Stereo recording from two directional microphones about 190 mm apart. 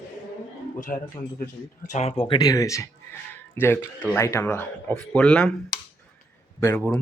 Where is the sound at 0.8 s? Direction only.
45° left (ahead or behind); by 5.5 s 5° left (ahead or behind).